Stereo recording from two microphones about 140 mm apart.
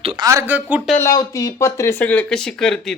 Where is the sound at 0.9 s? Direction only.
20° left (ahead or behind).